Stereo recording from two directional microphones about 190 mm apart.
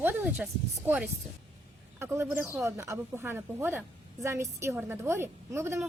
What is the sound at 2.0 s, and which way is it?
Speech, 15° right (ahead or behind).